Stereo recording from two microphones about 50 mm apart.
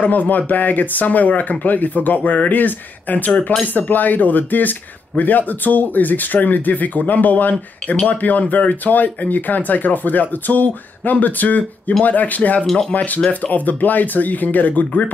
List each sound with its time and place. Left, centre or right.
0.0 s speech: left
7.9 s speech: left
8.2 s speech: left